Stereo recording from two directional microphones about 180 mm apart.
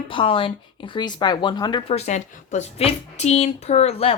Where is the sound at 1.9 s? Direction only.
40° left (ahead or behind).